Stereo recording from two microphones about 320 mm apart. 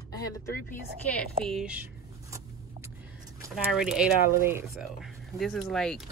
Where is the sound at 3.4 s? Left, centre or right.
Centre.